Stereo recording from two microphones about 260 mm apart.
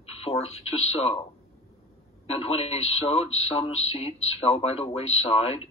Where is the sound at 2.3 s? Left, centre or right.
Left.